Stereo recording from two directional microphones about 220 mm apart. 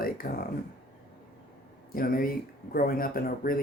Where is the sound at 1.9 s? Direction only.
40° left (ahead or behind).